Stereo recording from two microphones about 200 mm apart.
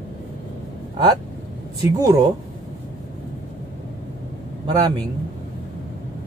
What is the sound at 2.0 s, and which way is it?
Speech, 15° right (ahead or behind).